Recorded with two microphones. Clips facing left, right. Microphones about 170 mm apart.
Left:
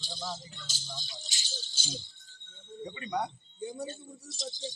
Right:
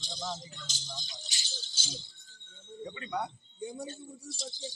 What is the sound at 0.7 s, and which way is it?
Speech, 15° right (ahead or behind).